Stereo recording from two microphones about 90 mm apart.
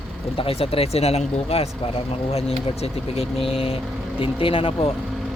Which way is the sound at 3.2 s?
90° left.